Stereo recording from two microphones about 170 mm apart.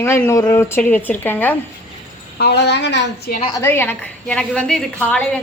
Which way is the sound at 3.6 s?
15° left (ahead or behind).